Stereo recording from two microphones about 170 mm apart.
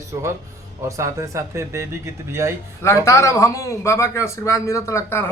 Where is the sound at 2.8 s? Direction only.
15° left (ahead or behind).